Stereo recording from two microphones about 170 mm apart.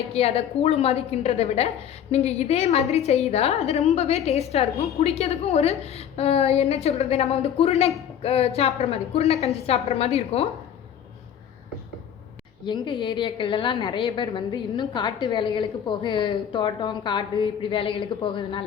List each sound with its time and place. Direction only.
0.1 s a woman's voice: 35° left (ahead or behind)
12.6 s a woman's voice: 25° left (ahead or behind)